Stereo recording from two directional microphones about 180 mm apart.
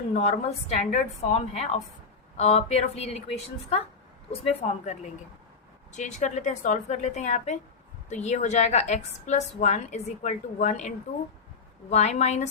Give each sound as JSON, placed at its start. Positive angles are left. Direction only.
{"t": 0.1, "sound": "a woman's voice", "side_deg": 40}